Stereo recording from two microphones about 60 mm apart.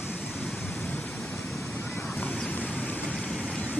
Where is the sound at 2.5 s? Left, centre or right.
Left.